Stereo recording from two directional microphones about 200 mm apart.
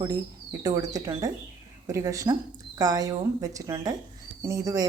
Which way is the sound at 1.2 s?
20° right (ahead or behind).